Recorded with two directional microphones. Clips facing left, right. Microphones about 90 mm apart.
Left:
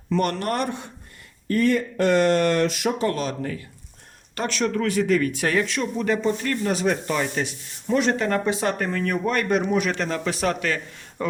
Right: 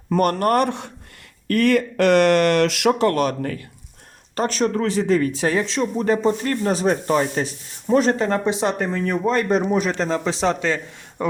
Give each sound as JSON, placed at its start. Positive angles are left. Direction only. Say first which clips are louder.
{"t": 0.1, "sound": "speech", "louder": "right 6 dB", "side_deg": -50}
{"t": 1.5, "sound": "speech", "louder": "right 3 dB", "side_deg": -75}
{"t": 4.4, "sound": "speech", "louder": "right 4 dB", "side_deg": -40}